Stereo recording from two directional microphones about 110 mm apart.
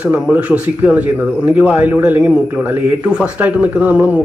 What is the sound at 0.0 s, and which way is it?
Speech, 15° right (ahead or behind).